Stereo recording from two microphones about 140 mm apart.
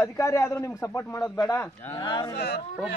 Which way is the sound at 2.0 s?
35° left (ahead or behind).